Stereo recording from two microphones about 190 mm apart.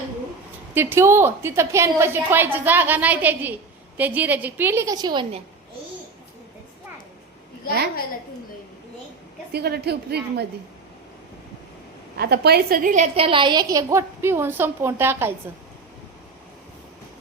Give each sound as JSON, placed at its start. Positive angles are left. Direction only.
{"t": 0.7, "sound": "a woman's voice", "side_deg": -10}
{"t": 9.5, "sound": "a woman's voice", "side_deg": -55}
{"t": 12.1, "sound": "a woman's voice", "side_deg": -55}